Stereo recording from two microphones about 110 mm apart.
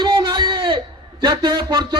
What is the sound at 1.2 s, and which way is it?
Speech, 45° right (ahead or behind).